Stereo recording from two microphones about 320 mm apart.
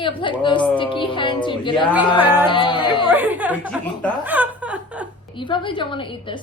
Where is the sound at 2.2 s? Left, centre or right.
Centre.